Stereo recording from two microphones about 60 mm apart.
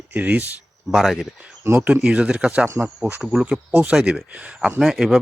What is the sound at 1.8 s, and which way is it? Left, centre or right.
Speech, right.